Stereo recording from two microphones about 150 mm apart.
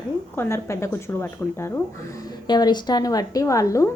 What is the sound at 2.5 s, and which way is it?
A woman's voice, 30° left (ahead or behind).